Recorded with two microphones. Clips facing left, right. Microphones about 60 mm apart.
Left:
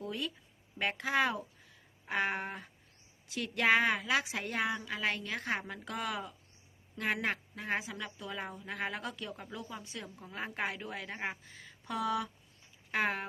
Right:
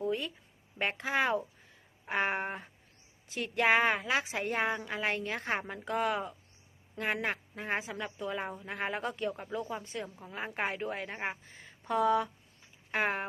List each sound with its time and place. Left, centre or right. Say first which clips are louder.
0.0 s a sound: right 5 dB; right
0.8 s a woman's voice: even; right
10.2 s a woman's voice: even; centre